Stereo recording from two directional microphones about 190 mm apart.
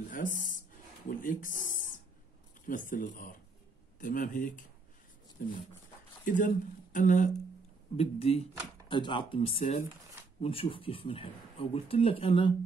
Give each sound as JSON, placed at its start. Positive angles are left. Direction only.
{"t": 0.1, "sound": "a sound", "side_deg": 45}
{"t": 2.6, "sound": "speech", "side_deg": 45}
{"t": 9.6, "sound": "speech", "side_deg": 40}